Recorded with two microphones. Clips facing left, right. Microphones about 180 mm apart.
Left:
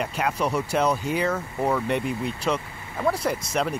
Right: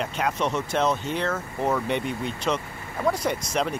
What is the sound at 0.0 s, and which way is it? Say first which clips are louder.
Speech: even; 5° left (ahead or behind).